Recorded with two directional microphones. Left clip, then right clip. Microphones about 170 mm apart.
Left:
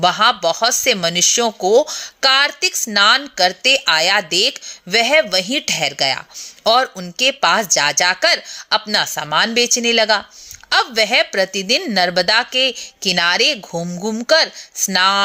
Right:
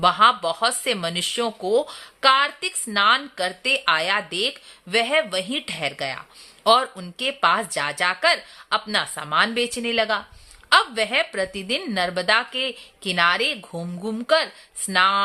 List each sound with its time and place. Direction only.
0.0 s speech: 20° left (ahead or behind)